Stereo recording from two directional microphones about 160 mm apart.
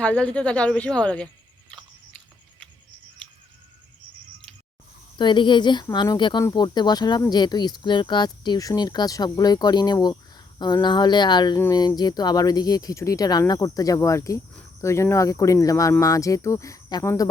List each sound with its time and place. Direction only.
0.0 s speech: 5° left (ahead or behind)
1.7 s biting: 5° left (ahead or behind)
5.1 s speech: 30° left (ahead or behind)